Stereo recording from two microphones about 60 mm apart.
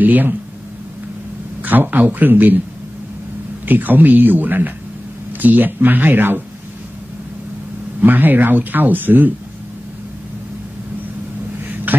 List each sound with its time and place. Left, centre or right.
0.0 s speech: right
1.6 s speech: right
3.6 s speech: right
8.0 s speech: right
11.9 s a sound: right